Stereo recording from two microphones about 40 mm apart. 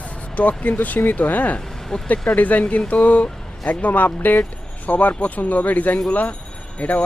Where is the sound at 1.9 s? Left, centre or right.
Left.